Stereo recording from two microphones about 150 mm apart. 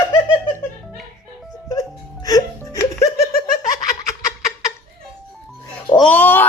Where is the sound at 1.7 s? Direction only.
25° left (ahead or behind).